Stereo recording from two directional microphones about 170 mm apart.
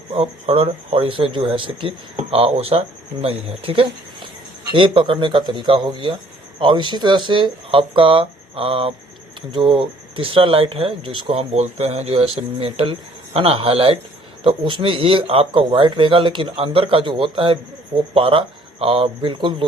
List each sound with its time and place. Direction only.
0.1 s speech: 35° right (ahead or behind)